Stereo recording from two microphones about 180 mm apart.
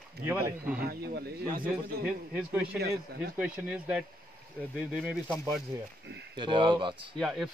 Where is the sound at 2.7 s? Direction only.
60° right (ahead or behind).